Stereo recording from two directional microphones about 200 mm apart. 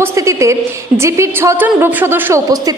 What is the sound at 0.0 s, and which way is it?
A woman's voice, 15° right (ahead or behind).